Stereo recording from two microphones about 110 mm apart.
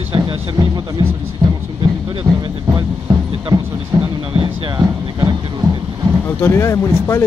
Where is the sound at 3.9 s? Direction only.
35° right (ahead or behind).